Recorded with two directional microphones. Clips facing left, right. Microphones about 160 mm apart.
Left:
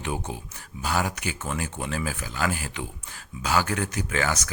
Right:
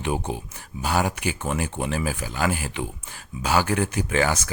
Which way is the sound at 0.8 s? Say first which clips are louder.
Right 3 dB; 15° right (ahead or behind).